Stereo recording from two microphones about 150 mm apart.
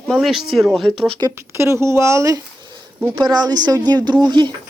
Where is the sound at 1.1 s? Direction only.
20° right (ahead or behind).